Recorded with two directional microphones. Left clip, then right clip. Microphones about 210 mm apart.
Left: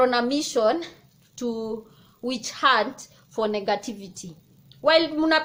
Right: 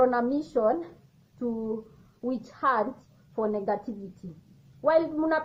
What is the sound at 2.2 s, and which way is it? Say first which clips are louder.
A woman's voice: left 5 dB; 35° left (ahead or behind).